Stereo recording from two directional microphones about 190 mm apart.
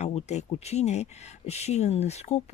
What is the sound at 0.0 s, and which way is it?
Speech, 35° left (ahead or behind).